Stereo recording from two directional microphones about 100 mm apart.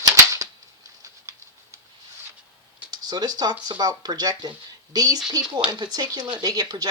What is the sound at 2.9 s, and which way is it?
Speech, 40° right (ahead or behind).